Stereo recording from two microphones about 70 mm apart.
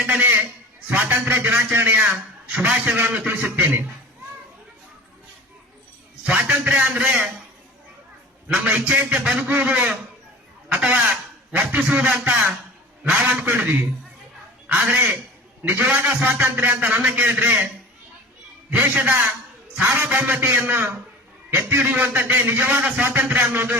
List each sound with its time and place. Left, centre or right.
0.0 s honk: right
0.9 s a sound: right
2.5 s a man's voice: centre
3.0 s a man's voice: right
6.2 s a man's voice: centre
8.5 s a man's voice: centre
18.9 s a man's voice: right